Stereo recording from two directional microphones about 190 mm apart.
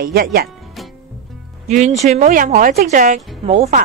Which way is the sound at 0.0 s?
55° right (ahead or behind).